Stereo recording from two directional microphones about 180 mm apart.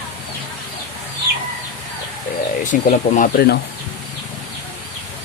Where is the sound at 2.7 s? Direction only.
50° left (ahead or behind).